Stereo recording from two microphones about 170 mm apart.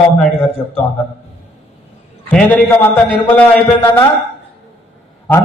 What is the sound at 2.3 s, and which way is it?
A man's voice, 10° left (ahead or behind).